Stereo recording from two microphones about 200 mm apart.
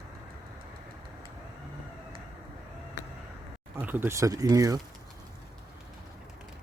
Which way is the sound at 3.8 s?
10° right (ahead or behind).